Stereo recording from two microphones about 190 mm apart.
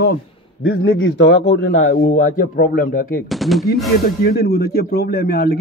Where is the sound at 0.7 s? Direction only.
80° left.